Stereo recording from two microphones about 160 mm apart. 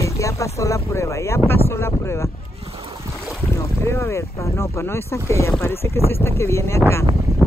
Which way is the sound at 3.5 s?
15° left (ahead or behind).